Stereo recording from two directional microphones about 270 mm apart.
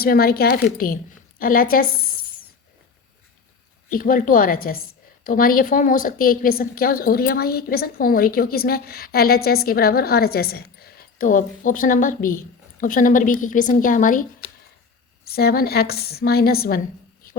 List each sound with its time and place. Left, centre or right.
0.0 s a woman's voice: left
3.8 s a woman's voice: left
15.3 s a woman's voice: left